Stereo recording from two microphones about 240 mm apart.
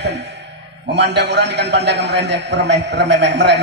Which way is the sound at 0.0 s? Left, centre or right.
Right.